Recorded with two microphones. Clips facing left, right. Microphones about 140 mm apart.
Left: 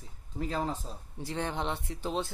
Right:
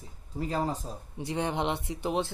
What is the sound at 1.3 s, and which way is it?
Speech, 20° right (ahead or behind).